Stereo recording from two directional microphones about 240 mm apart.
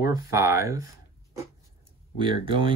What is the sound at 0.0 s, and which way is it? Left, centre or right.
Speech, centre.